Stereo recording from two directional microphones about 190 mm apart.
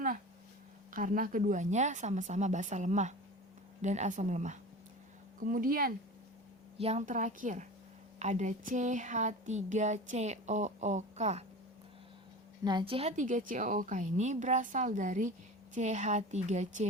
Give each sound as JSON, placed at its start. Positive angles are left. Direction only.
{"t": 0.9, "sound": "speech", "side_deg": -45}
{"t": 6.7, "sound": "speech", "side_deg": -35}
{"t": 12.6, "sound": "speech", "side_deg": -25}